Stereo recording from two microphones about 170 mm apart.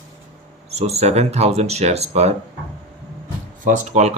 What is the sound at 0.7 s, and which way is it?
Speech, 40° right (ahead or behind).